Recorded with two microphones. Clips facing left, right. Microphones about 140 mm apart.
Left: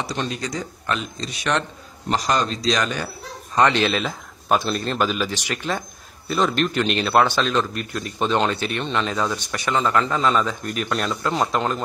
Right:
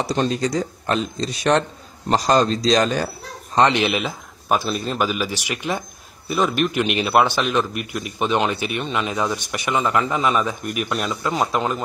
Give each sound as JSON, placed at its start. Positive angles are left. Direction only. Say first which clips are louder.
{"t": 0.0, "sound": "speech", "louder": "right 6 dB", "side_deg": -35}
{"t": 3.5, "sound": "a man's voice", "louder": "right 1 dB", "side_deg": -20}